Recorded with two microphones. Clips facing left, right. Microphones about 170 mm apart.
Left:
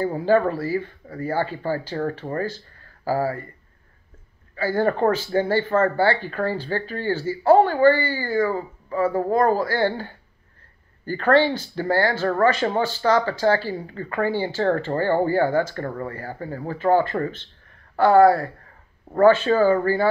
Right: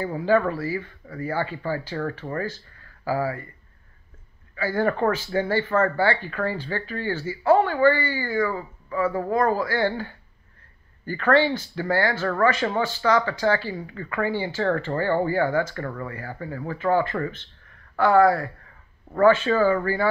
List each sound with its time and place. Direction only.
0.0 s speech: 35° left (ahead or behind)
4.6 s speech: 30° left (ahead or behind)